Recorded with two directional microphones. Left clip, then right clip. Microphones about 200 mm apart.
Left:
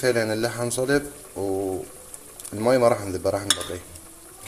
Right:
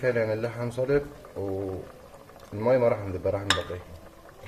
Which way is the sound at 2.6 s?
30° left (ahead or behind).